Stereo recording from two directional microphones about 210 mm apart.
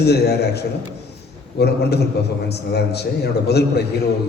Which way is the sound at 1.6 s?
50° left (ahead or behind).